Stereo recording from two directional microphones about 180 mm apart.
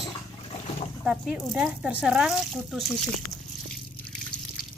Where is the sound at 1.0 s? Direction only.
5° right (ahead or behind).